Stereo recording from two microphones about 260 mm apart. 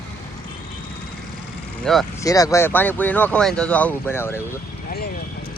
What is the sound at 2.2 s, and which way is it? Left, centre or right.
Speech, centre.